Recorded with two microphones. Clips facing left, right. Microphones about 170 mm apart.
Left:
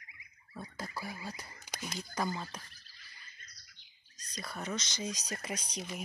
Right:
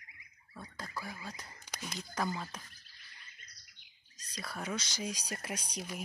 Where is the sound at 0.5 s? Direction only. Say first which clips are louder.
Left 2 dB; 10° left (ahead or behind).